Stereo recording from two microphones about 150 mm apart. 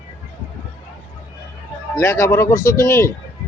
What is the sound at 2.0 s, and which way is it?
Speech, 20° left (ahead or behind).